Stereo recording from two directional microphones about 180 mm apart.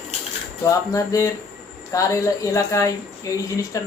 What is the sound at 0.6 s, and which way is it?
Speech, 20° left (ahead or behind).